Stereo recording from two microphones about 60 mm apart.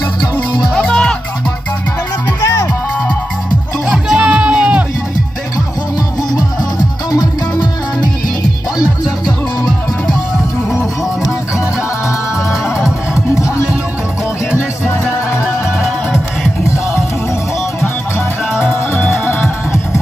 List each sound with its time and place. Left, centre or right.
0.7 s music: centre
2.4 s music: left
3.9 s music: centre
4.3 s music: centre
7.1 s music: left
15.4 s music: centre
18.6 s music: left